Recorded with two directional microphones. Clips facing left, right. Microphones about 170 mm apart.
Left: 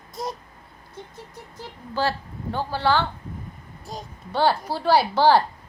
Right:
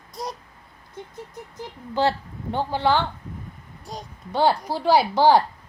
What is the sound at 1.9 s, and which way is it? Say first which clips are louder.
Speech: right 3 dB; 20° right (ahead or behind).